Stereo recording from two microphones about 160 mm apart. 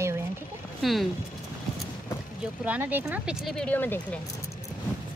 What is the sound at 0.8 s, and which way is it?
Speech, centre (ahead or behind).